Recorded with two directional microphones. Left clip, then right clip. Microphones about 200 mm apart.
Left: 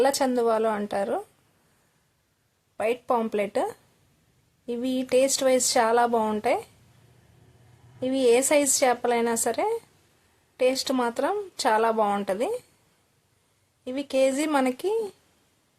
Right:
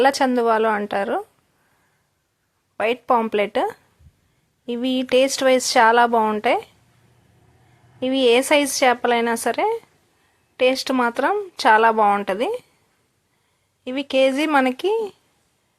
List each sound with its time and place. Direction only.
0.0 s speech: 15° right (ahead or behind)
2.7 s speech: 15° right (ahead or behind)
7.9 s speech: 15° right (ahead or behind)
13.8 s speech: 15° right (ahead or behind)